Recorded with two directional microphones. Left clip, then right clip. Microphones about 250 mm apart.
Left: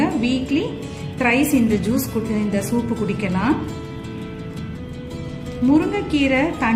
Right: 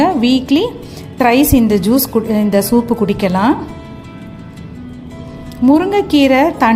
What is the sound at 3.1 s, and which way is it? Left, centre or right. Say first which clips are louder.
Speech: right 9 dB; right.